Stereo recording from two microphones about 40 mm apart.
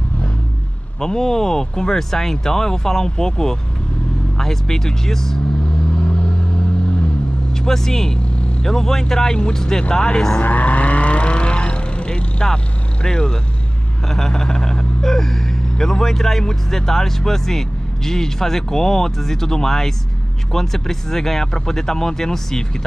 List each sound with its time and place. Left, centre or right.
1.0 s speech: centre
7.6 s speech: centre
10.4 s vehicle: left
13.0 s speech: centre
14.0 s a sound: centre
15.8 s speech: centre